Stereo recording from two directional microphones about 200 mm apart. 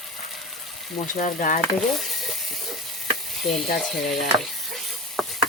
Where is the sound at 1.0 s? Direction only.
40° left (ahead or behind).